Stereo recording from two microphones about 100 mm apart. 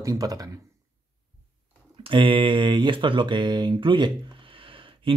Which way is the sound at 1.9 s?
55° right (ahead or behind).